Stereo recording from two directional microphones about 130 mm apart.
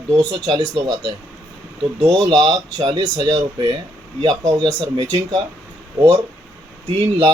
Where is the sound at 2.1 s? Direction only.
35° right (ahead or behind).